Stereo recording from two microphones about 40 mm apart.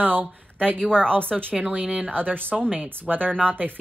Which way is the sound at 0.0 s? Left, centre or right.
Right.